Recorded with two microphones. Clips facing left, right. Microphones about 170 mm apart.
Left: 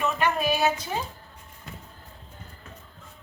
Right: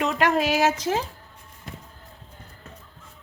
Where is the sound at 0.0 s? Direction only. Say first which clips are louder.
Right 3 dB; 85° right.